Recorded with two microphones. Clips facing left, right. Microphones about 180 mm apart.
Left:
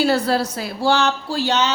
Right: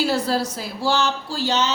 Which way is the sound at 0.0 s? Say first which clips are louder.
Left 3 dB; 65° left (ahead or behind).